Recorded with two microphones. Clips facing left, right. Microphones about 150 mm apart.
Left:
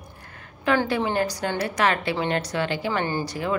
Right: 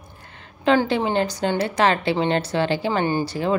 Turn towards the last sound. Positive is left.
turn(degrees=-30)  # may be behind; listen again after turning